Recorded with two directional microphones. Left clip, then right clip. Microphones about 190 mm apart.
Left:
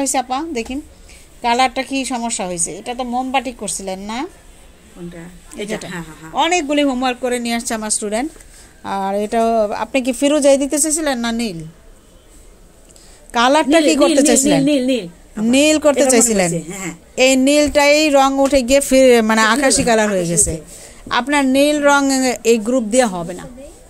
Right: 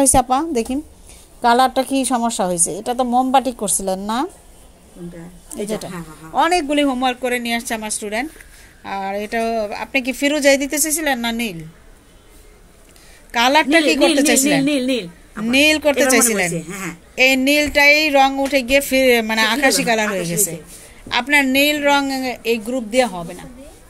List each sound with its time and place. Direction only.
0.0 s a woman's voice: 25° right (ahead or behind)
5.6 s speech: 15° right (ahead or behind)
6.7 s a woman's voice: 5° left (ahead or behind)
7.3 s speech: 15° left (ahead or behind)
13.3 s speech: 20° left (ahead or behind)
14.4 s a woman's voice: centre (ahead or behind)
15.4 s speech: 20° left (ahead or behind)
16.5 s a woman's voice: centre (ahead or behind)
17.1 s speech: 20° left (ahead or behind)
20.2 s a woman's voice: 90° left
21.1 s speech: 20° left (ahead or behind)
21.9 s speech: 35° left (ahead or behind)